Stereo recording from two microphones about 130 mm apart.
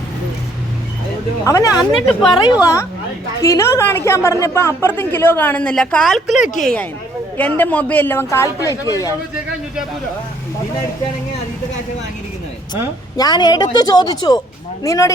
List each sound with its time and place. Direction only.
1.5 s speech: 25° left (ahead or behind)
1.7 s speech: centre (ahead or behind)
3.4 s a woman's voice: 20° left (ahead or behind)
12.7 s speech: 30° left (ahead or behind)